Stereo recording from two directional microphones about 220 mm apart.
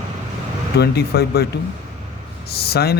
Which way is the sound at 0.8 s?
45° left (ahead or behind).